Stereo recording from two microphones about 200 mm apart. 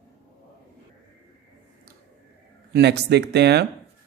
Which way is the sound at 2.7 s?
55° right (ahead or behind).